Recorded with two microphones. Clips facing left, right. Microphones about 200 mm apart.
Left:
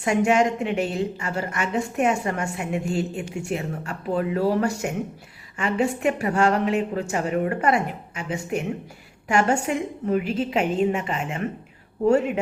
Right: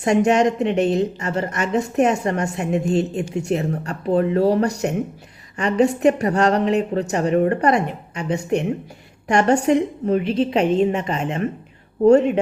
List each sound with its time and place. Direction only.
0.0 s a woman's voice: 40° right (ahead or behind)